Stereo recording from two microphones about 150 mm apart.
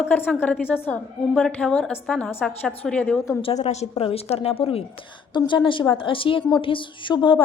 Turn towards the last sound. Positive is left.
turn(degrees=35)  # may be behind; listen again after turning